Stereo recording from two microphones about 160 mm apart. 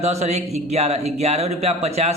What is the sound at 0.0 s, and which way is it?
Speech, 40° right (ahead or behind).